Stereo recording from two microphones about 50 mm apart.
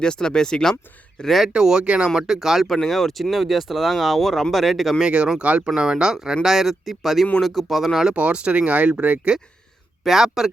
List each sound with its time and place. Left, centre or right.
0.0 s speech: centre
1.5 s speech: centre
2.1 s speech: centre
2.6 s speech: centre
4.9 s speech: centre
8.1 s speech: right
10.0 s speech: centre